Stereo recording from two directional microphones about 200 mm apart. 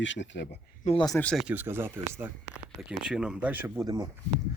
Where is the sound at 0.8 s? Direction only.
30° left (ahead or behind).